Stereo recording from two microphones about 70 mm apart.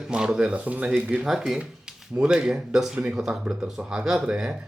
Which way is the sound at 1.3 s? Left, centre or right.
Centre.